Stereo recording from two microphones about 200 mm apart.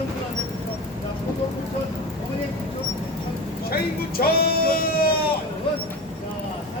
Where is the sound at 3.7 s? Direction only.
50° left (ahead or behind).